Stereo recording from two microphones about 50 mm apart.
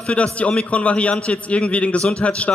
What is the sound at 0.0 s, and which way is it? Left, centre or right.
A man's voice, left.